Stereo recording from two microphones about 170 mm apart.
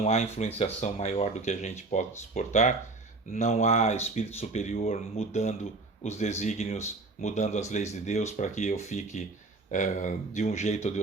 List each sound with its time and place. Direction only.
0.0 s speech: 40° left (ahead or behind)